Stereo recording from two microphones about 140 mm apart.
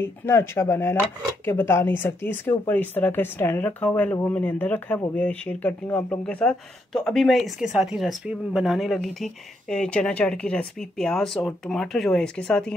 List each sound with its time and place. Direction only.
0.0 s speech: 20° left (ahead or behind)